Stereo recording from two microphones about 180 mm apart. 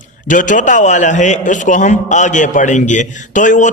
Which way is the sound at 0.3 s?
45° left (ahead or behind).